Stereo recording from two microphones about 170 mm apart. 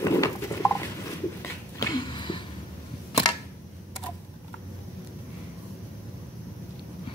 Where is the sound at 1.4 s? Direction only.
20° left (ahead or behind).